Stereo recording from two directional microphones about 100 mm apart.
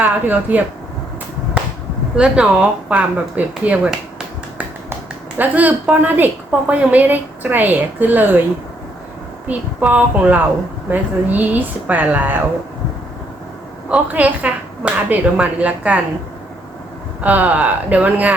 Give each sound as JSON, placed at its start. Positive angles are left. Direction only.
{"t": 0.0, "sound": "a woman's voice", "side_deg": -15}
{"t": 1.6, "sound": "a sound", "side_deg": -10}
{"t": 2.1, "sound": "a woman's voice", "side_deg": -10}
{"t": 5.4, "sound": "a woman's voice", "side_deg": -15}
{"t": 9.5, "sound": "a woman's voice", "side_deg": -15}
{"t": 13.9, "sound": "a woman's voice", "side_deg": -15}
{"t": 17.2, "sound": "a woman's voice", "side_deg": -15}